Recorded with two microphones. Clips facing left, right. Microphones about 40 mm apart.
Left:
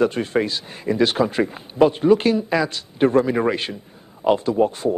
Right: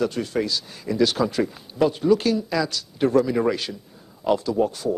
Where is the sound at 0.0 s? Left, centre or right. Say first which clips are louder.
Left 4 dB; left.